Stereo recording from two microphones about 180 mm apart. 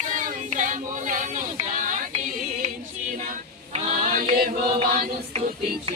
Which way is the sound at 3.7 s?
50° right (ahead or behind).